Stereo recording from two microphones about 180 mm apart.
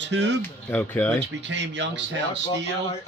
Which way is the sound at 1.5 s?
80° right.